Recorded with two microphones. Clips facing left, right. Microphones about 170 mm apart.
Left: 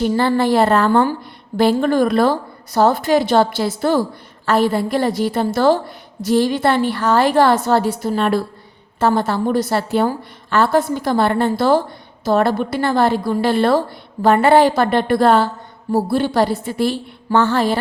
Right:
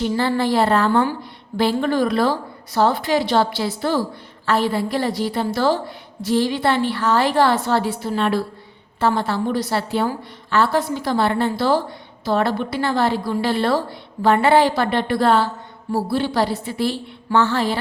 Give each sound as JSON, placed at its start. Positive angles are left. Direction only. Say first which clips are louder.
{"t": 0.0, "sound": "a woman's voice", "louder": "left 4 dB", "side_deg": 50}